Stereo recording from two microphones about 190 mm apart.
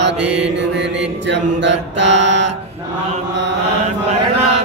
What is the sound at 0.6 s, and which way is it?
Mantra, 70° right (ahead or behind).